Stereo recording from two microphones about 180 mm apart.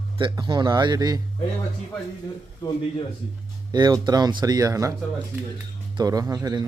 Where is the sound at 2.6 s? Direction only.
20° left (ahead or behind).